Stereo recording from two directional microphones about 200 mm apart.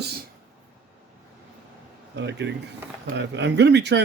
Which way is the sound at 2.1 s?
60° right (ahead or behind).